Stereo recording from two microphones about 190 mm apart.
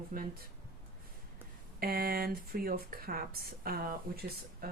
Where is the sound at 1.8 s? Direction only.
50° right (ahead or behind).